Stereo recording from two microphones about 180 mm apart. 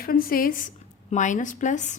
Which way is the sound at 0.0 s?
55° left (ahead or behind).